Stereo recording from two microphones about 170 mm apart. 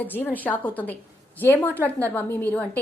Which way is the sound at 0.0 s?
10° left (ahead or behind).